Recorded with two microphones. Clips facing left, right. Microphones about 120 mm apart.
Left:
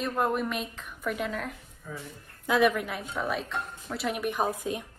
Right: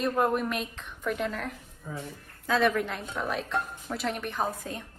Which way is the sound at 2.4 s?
10° left (ahead or behind).